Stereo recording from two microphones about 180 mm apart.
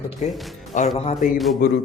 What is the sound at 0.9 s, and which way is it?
Speech, 35° left (ahead or behind).